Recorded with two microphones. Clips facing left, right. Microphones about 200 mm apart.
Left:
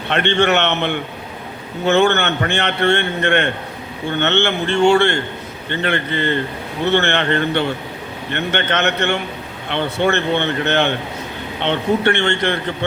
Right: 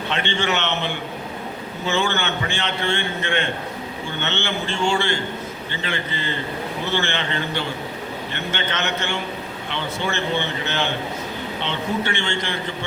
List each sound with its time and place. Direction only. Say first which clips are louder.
0.1 s a man's voice: left 8 dB; 60° left (ahead or behind)